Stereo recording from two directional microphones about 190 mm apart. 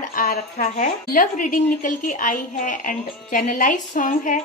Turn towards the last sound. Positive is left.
turn(degrees=45)  # may be behind; listen again after turning